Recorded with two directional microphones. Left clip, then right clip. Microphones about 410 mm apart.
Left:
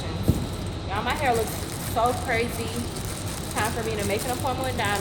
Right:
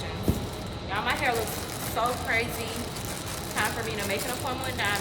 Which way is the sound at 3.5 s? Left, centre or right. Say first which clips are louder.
Left 2 dB; centre.